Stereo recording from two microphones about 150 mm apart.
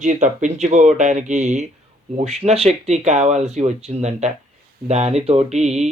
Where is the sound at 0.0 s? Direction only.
55° right (ahead or behind).